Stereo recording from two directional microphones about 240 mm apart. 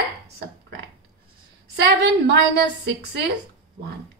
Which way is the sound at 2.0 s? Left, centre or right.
Right.